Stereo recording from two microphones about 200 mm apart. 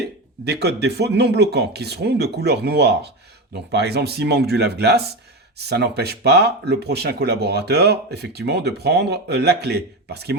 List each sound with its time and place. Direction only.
0.4 s speech: 55° right (ahead or behind)